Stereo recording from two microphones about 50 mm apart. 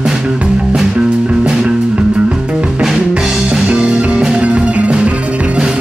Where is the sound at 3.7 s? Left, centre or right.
Right.